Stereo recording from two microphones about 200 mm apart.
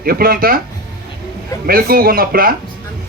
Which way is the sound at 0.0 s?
50° right (ahead or behind).